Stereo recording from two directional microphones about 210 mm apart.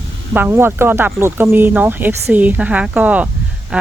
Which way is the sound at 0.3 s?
10° right (ahead or behind).